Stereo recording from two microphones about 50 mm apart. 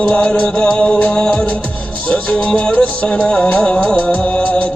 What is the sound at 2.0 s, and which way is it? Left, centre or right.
Music, left.